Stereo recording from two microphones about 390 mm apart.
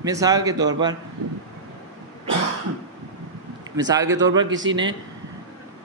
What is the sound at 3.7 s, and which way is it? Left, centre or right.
Speech, centre.